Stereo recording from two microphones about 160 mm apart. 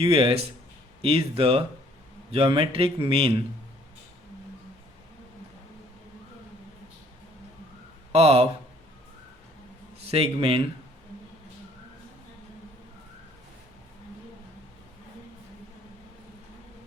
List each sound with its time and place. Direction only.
0.0 s speech: 35° right (ahead or behind)
8.1 s speech: 40° right (ahead or behind)
10.0 s speech: 40° right (ahead or behind)